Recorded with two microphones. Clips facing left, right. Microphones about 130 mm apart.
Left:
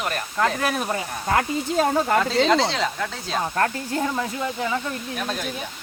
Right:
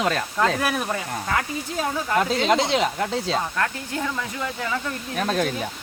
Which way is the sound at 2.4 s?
15° right (ahead or behind).